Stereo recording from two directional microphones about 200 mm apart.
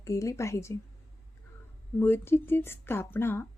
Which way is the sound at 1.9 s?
10° left (ahead or behind).